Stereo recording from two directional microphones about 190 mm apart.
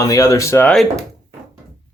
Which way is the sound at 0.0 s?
20° left (ahead or behind).